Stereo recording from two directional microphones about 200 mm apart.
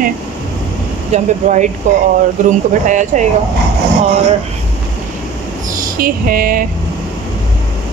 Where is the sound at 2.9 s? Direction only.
40° right (ahead or behind).